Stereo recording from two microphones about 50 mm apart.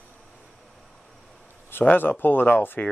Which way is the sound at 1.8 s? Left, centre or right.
Left.